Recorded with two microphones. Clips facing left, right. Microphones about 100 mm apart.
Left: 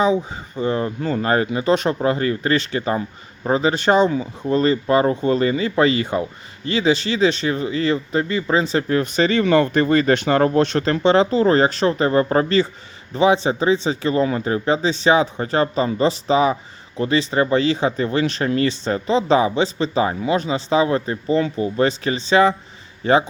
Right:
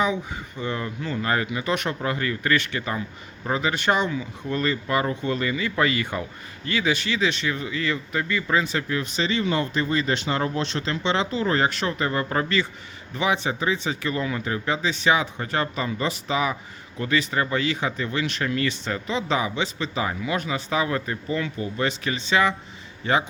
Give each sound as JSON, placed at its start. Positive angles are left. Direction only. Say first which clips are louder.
{"t": 0.0, "sound": "speech", "louder": "left 6 dB", "side_deg": 35}
{"t": 9.0, "sound": "speech", "louder": "left 8 dB", "side_deg": 50}